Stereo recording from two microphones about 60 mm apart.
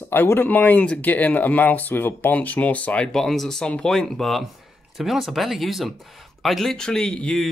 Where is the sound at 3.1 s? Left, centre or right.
Centre.